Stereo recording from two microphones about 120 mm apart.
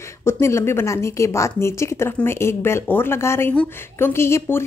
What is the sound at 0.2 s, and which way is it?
A woman's voice, 20° left (ahead or behind).